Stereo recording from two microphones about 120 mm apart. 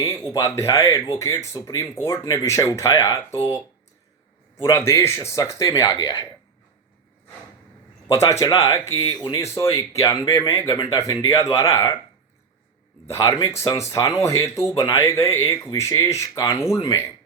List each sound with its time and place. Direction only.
0.0 s speech: 25° left (ahead or behind)
4.6 s speech: 25° left (ahead or behind)
8.0 s speech: 25° left (ahead or behind)
13.1 s speech: 30° left (ahead or behind)